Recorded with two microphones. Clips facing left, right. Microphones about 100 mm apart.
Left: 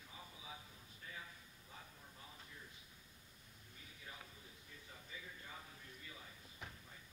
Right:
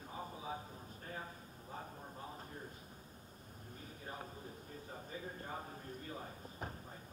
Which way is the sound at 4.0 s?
40° right (ahead or behind).